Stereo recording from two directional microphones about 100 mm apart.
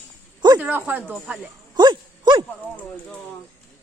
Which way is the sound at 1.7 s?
45° right (ahead or behind).